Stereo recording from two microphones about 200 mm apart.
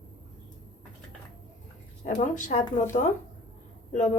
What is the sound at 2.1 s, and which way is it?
Speech, 40° left (ahead or behind).